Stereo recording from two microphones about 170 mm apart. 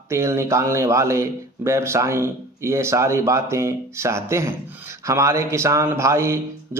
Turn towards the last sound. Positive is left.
turn(degrees=-15)  # may be behind; listen again after turning